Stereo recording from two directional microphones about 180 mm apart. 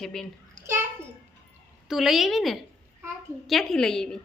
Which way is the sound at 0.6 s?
15° right (ahead or behind).